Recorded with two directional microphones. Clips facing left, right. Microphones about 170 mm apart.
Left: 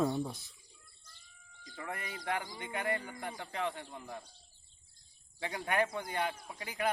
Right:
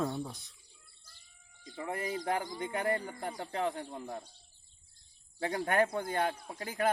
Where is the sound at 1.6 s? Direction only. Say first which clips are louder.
Right 6 dB; 25° right (ahead or behind).